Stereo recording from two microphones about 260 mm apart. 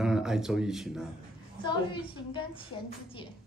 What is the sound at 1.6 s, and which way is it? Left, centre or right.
A child's voice, centre.